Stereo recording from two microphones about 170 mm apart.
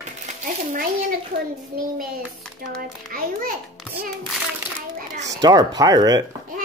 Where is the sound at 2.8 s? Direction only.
60° right (ahead or behind).